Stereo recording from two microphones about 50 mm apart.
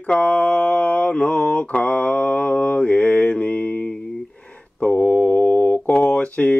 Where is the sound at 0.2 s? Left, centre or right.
Left.